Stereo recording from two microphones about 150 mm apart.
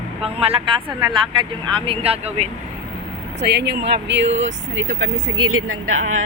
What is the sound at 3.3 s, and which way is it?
Speech, 90° right.